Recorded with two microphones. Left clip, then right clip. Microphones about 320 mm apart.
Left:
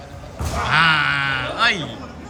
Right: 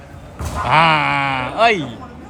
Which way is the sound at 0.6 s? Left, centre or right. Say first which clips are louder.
Right 3 dB; centre.